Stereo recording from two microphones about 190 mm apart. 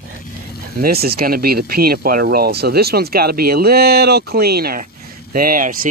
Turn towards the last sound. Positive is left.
turn(degrees=-45)  # may be behind; listen again after turning